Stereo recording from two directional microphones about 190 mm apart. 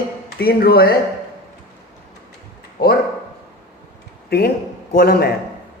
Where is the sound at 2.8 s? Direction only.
50° left (ahead or behind).